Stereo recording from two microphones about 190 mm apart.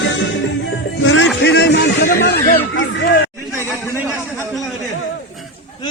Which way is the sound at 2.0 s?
50° left (ahead or behind).